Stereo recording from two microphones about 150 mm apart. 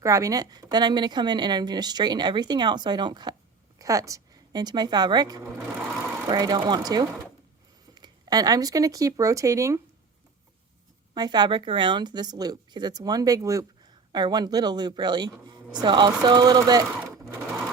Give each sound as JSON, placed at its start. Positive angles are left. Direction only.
{"t": 0.0, "sound": "speech", "side_deg": -20}
{"t": 11.1, "sound": "speech", "side_deg": -30}